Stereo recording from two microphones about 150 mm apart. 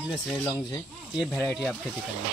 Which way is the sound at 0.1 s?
5° left (ahead or behind).